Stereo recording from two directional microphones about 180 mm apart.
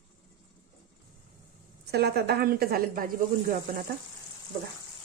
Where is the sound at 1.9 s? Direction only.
60° right (ahead or behind).